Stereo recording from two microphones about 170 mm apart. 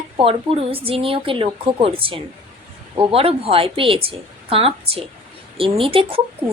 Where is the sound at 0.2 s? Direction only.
35° right (ahead or behind).